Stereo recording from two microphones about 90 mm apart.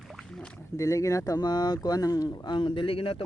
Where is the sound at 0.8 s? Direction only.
35° left (ahead or behind).